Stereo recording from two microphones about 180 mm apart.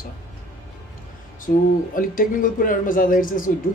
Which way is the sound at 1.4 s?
50° left (ahead or behind).